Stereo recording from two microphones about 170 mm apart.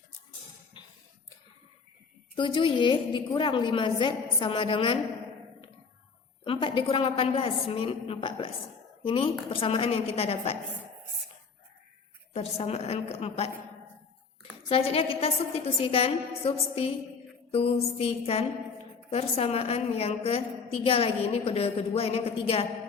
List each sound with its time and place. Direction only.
2.3 s a woman's voice: 30° left (ahead or behind)
6.4 s a woman's voice: 30° left (ahead or behind)
12.3 s a woman's voice: 35° left (ahead or behind)
14.7 s a woman's voice: 35° left (ahead or behind)